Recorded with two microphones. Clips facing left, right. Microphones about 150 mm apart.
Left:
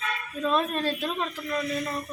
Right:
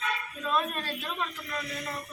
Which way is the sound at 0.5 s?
30° left (ahead or behind).